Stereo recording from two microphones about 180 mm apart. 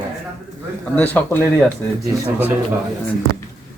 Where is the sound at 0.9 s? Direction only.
10° left (ahead or behind).